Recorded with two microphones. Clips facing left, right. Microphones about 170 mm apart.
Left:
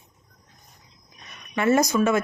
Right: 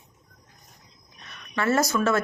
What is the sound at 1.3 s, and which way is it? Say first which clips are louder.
Speech: left 4 dB; 20° left (ahead or behind).